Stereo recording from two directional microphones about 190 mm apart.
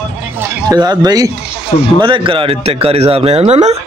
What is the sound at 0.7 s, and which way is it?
A man's voice, 20° right (ahead or behind).